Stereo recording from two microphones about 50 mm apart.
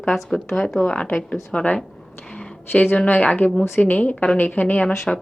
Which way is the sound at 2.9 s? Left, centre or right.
Left.